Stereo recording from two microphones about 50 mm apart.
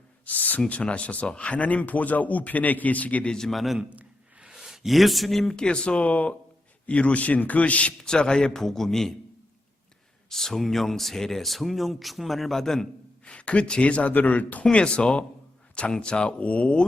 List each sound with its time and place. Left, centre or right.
0.3 s speech: left
3.2 s a man's voice: centre
3.8 s a sound: right
4.4 s speech: centre
5.5 s speech: centre
8.0 s a man's voice: centre
10.2 s speech: centre
13.2 s speech: left
14.6 s speech: left